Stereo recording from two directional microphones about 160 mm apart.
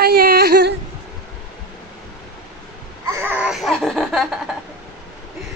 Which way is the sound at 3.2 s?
10° right (ahead or behind).